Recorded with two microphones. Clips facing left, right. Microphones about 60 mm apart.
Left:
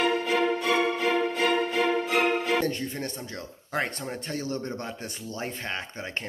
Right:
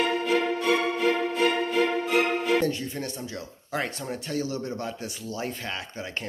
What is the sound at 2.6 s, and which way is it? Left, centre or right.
Speech, left.